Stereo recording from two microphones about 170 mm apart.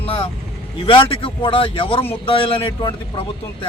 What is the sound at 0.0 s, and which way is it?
Vehicle, 35° left (ahead or behind).